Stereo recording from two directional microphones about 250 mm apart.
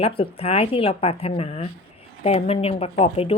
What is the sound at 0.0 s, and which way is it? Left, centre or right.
A woman's voice, left.